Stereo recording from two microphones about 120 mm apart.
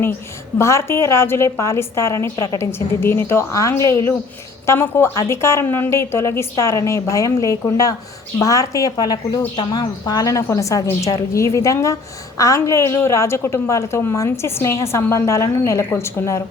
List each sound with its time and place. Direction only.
0.6 s a woman's voice: 25° left (ahead or behind)